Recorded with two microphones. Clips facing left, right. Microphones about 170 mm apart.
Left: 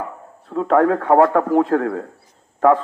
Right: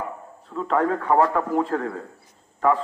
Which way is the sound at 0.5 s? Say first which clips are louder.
Left 7 dB; 55° left (ahead or behind).